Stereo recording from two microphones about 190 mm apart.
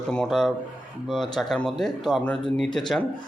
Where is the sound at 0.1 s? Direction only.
Centre (ahead or behind).